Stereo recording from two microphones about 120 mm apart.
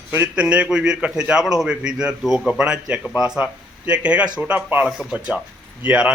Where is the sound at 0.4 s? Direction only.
10° right (ahead or behind).